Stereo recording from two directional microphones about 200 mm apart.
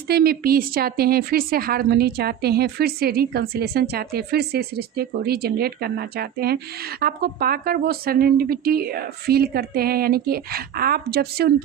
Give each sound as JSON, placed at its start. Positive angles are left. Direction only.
{"t": 0.1, "sound": "a woman's voice", "side_deg": -50}